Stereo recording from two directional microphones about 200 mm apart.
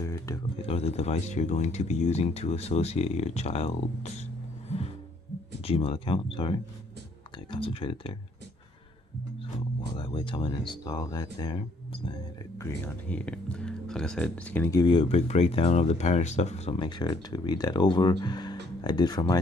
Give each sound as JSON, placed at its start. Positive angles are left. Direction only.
{"t": 0.0, "sound": "a sound", "side_deg": 15}
{"t": 0.7, "sound": "speech", "side_deg": 30}
{"t": 5.6, "sound": "speech", "side_deg": 30}
{"t": 9.9, "sound": "speech", "side_deg": 25}
{"t": 12.5, "sound": "speech", "side_deg": 10}